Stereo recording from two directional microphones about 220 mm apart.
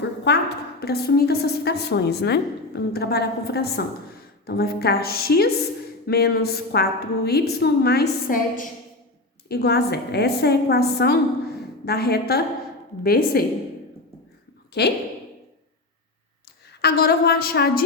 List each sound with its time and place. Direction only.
0.3 s a woman's voice: 50° left (ahead or behind)
14.7 s a woman's voice: 50° left (ahead or behind)
16.8 s a woman's voice: 45° left (ahead or behind)